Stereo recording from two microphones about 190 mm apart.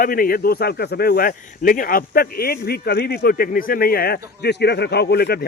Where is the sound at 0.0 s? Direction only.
50° left (ahead or behind).